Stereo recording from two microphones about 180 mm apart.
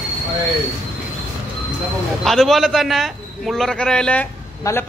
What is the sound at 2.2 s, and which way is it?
A man's voice, centre (ahead or behind).